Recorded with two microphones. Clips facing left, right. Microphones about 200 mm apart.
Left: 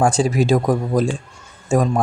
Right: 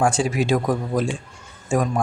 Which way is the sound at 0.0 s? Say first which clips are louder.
Left 3 dB; 35° left (ahead or behind).